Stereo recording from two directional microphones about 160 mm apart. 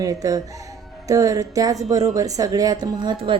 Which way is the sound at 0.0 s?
20° right (ahead or behind).